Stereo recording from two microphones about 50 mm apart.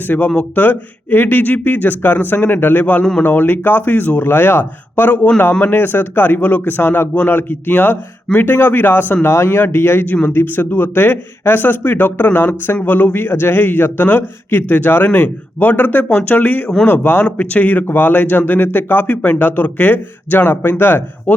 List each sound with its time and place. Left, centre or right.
0.3 s speech: left
9.2 s speech: left